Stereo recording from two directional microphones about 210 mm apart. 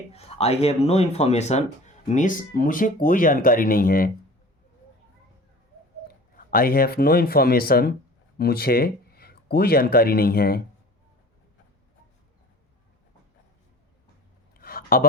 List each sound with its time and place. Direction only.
0.1 s speech: 30° left (ahead or behind)
6.1 s speech: 45° left (ahead or behind)
14.6 s a sound: 45° left (ahead or behind)